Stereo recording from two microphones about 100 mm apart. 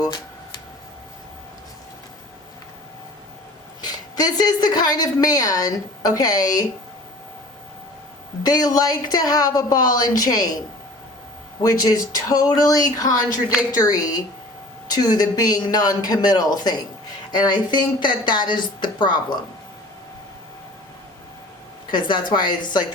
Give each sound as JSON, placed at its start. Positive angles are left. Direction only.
{"t": 3.8, "sound": "a woman's voice", "side_deg": 45}
{"t": 8.4, "sound": "a woman's voice", "side_deg": 40}
{"t": 11.6, "sound": "a woman's voice", "side_deg": 40}
{"t": 21.9, "sound": "speech", "side_deg": 50}